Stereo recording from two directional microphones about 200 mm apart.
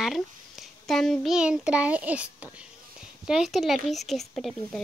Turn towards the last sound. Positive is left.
turn(degrees=0)  # may be behind; listen again after turning